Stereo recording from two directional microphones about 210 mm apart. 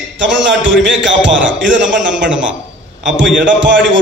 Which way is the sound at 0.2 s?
60° right (ahead or behind).